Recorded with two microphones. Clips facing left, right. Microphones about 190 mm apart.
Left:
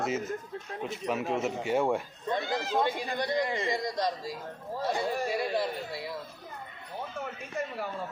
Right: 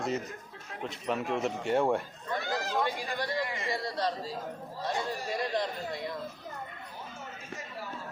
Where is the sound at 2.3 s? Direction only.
20° left (ahead or behind).